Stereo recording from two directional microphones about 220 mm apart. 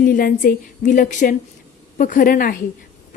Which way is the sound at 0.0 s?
40° left (ahead or behind).